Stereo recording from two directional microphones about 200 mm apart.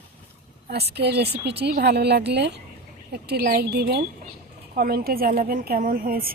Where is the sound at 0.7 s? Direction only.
55° right (ahead or behind).